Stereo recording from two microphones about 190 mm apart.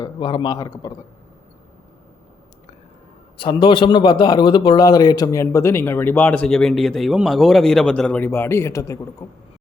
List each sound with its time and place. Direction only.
0.0 s speech: 25° left (ahead or behind)
3.3 s a man's voice: 25° left (ahead or behind)